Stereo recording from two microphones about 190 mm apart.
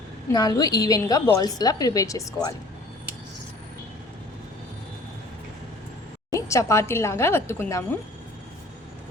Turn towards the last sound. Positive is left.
turn(degrees=10)  # may be behind; listen again after turning